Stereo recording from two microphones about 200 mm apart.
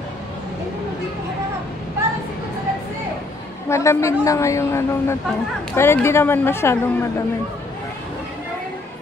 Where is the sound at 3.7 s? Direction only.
15° left (ahead or behind).